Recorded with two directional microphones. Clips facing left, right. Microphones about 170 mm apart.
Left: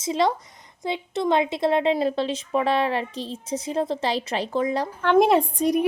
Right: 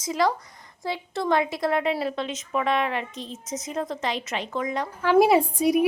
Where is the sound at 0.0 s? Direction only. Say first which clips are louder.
Left 2 dB; 25° left (ahead or behind).